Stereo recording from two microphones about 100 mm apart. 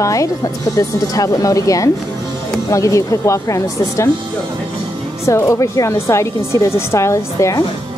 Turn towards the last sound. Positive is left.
turn(degrees=30)  # may be behind; listen again after turning